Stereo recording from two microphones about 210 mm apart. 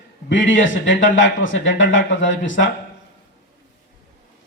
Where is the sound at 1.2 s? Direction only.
65° left (ahead or behind).